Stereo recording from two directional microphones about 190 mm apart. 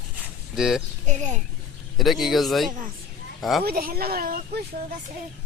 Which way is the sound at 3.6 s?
50° right (ahead or behind).